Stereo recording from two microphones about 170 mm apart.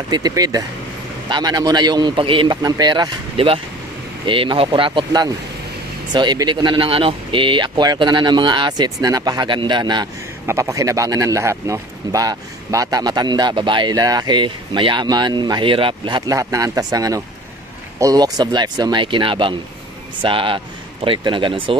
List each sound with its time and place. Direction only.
0.1 s speech: 20° right (ahead or behind)